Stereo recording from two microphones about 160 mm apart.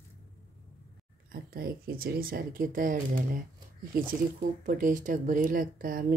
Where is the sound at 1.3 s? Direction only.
70° right (ahead or behind).